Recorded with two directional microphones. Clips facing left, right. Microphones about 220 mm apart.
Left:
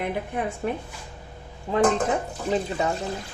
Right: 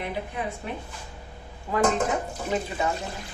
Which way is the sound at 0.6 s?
45° left (ahead or behind).